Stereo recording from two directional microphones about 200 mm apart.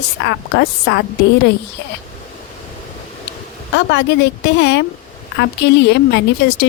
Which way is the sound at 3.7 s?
60° left (ahead or behind).